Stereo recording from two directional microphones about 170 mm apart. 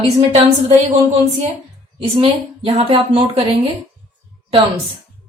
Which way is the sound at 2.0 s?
35° right (ahead or behind).